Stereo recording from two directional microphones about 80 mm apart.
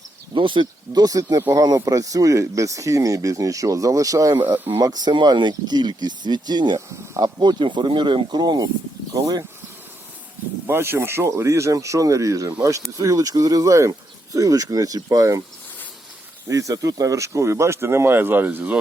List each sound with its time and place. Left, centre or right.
0.3 s speech: right
1.0 s speech: right
4.4 s speech: right
4.7 s speech: right
9.1 s speech: right
10.7 s speech: right
16.5 s speech: right